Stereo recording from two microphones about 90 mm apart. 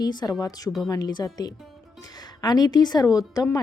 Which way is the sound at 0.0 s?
50° left (ahead or behind).